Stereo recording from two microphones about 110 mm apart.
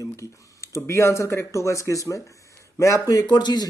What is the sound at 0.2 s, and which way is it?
A man's voice, 25° left (ahead or behind).